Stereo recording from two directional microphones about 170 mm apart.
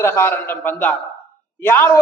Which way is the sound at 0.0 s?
15° left (ahead or behind).